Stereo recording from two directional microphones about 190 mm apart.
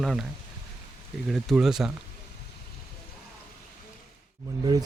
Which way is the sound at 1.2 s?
Centre (ahead or behind).